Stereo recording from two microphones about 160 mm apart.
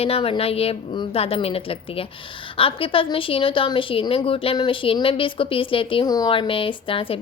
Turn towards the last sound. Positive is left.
turn(degrees=35)  # may be behind; listen again after turning